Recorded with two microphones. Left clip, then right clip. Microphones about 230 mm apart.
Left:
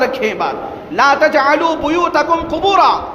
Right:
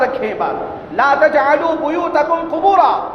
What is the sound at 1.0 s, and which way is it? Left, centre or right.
A woman's voice, left.